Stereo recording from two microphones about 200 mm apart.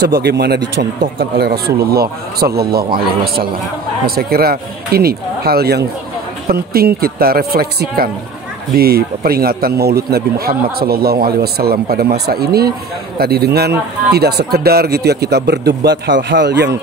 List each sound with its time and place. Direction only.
0.0 s a man's voice: 55° right (ahead or behind)